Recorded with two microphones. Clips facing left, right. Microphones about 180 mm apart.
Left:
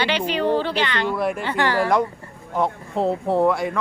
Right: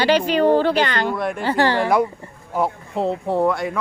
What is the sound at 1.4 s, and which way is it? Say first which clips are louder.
Speech: right 3 dB; 35° right (ahead or behind).